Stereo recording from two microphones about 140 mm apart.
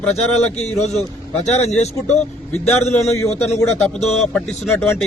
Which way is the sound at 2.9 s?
20° left (ahead or behind).